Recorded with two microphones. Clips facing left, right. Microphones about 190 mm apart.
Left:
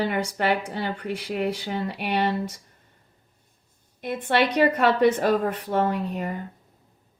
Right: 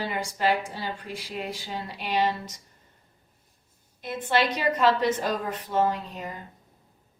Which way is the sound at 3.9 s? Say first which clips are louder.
Left 3 dB; 60° left (ahead or behind).